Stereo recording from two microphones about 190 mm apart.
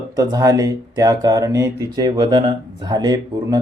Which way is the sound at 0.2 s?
20° right (ahead or behind).